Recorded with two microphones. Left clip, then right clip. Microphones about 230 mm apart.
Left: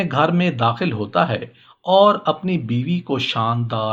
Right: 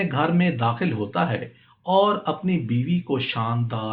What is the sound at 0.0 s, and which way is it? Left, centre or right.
Speech, left.